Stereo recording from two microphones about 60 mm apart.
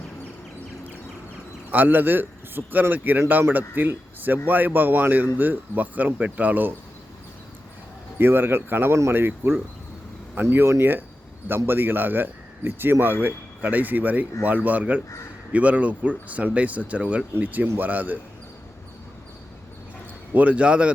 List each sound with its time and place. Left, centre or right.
1.7 s speech: right
8.2 s speech: right
20.3 s speech: right